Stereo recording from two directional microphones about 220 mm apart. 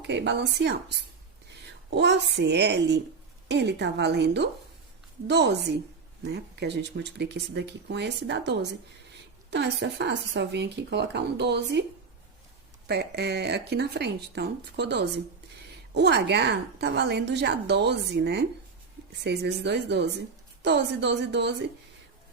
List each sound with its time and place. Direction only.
0.1 s speech: 50° right (ahead or behind)
1.9 s speech: 50° right (ahead or behind)
12.9 s speech: 50° right (ahead or behind)